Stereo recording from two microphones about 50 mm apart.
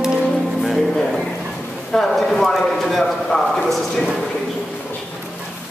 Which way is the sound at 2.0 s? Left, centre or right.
Centre.